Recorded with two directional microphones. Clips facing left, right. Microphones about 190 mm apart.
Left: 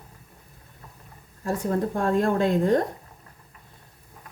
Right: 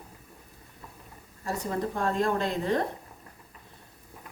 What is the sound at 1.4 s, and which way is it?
A woman's voice, 50° left (ahead or behind).